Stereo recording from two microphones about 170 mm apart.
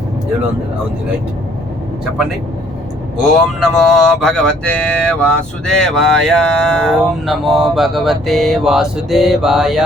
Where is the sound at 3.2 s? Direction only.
Centre (ahead or behind).